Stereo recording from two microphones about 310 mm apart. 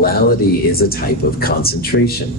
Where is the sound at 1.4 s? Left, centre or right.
Left.